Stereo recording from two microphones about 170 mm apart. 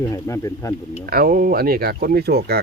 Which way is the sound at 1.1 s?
60° right (ahead or behind).